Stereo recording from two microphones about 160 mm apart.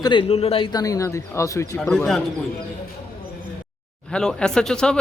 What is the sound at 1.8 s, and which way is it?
Speech, 5° left (ahead or behind).